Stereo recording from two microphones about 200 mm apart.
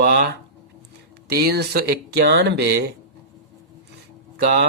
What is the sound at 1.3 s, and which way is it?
Speech, 50° right (ahead or behind).